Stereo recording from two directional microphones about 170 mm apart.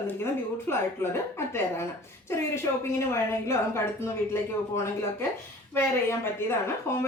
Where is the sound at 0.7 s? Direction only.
15° left (ahead or behind).